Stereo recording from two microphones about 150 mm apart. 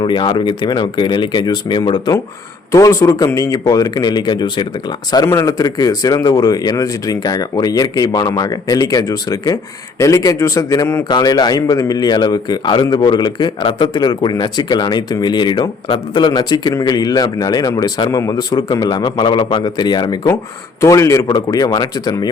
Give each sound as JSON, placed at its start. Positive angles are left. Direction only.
{"t": 0.0, "sound": "a man's voice", "side_deg": 30}
{"t": 5.2, "sound": "a man's voice", "side_deg": 20}